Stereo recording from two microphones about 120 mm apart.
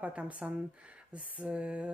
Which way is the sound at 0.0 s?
10° right (ahead or behind).